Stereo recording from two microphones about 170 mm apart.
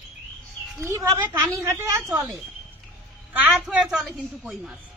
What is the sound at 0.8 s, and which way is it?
Speech, 15° right (ahead or behind).